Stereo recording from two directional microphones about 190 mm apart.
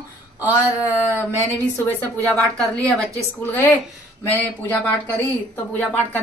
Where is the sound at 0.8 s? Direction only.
10° left (ahead or behind).